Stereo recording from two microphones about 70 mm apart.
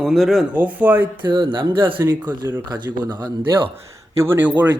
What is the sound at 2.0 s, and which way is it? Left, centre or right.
Speech, right.